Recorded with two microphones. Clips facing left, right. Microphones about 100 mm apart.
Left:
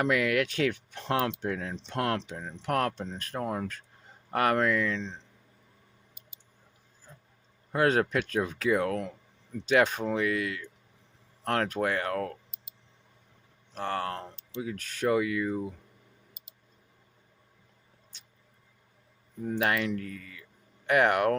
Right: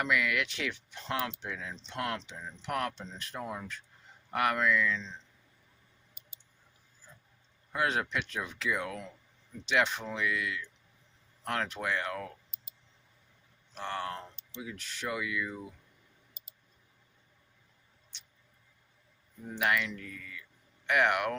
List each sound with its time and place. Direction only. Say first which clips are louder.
0.0 s speech: left 5 dB; 45° left (ahead or behind)
4.3 s speech: left 4 dB; 40° left (ahead or behind)
4.5 s speech: left 2 dB; 55° left (ahead or behind)
7.7 s speech: left 6 dB; 45° left (ahead or behind)
13.7 s speech: left 4 dB; 45° left (ahead or behind)
19.5 s speech: left 3 dB; 35° left (ahead or behind)
19.9 s speech: left 8 dB; 50° left (ahead or behind)